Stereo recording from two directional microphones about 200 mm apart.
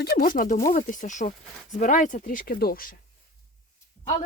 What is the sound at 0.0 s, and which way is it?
Speech, 45° left (ahead or behind).